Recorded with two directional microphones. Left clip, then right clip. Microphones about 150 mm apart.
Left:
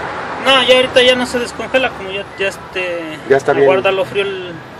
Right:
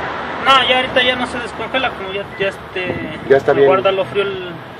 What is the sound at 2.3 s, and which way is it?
Speech, 90° left.